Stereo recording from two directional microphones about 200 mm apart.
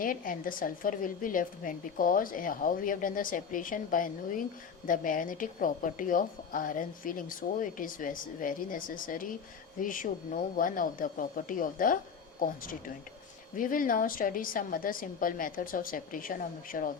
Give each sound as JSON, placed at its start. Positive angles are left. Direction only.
{"t": 0.0, "sound": "a woman's voice", "side_deg": 45}